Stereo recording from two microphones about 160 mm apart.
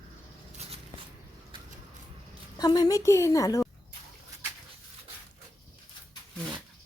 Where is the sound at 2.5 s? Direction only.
25° left (ahead or behind).